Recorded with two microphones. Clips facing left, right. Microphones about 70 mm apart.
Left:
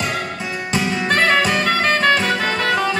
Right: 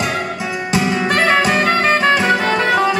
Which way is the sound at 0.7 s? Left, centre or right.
Centre.